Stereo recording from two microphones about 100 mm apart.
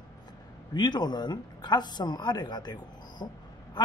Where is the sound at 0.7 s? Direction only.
45° left (ahead or behind).